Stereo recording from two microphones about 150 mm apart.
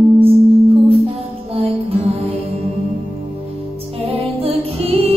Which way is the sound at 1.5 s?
40° right (ahead or behind).